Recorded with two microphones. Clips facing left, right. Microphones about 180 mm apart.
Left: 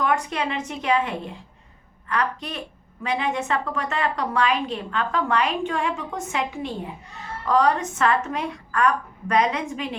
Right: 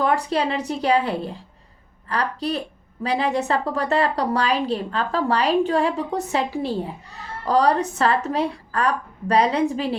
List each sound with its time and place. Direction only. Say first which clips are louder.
0.0 s a woman's voice: right 3 dB; 35° right (ahead or behind)